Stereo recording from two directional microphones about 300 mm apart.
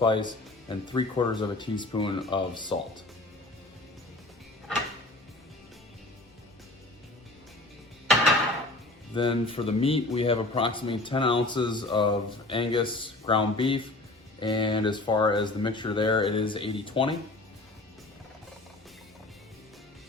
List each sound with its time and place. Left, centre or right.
0.0 s a man's voice: centre
9.1 s a man's voice: centre